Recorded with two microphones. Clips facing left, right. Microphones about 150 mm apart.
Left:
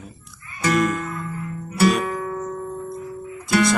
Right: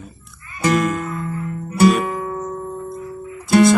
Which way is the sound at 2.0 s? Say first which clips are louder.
Right 2 dB; 25° right (ahead or behind).